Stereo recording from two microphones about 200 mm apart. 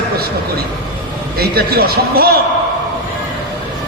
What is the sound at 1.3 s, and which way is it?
Speech, 50° right (ahead or behind).